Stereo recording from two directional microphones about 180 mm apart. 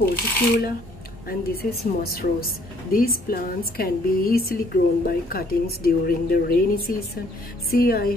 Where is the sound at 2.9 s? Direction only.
55° left (ahead or behind).